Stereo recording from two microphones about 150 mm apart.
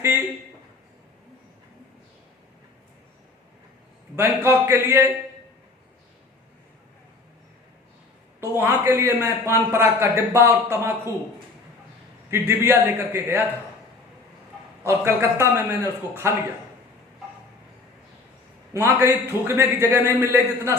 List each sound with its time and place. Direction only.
4.1 s a man's voice: 15° right (ahead or behind)
8.4 s a man's voice: 15° right (ahead or behind)
12.3 s a man's voice: 15° right (ahead or behind)
14.8 s a man's voice: 15° right (ahead or behind)
18.7 s a man's voice: 15° right (ahead or behind)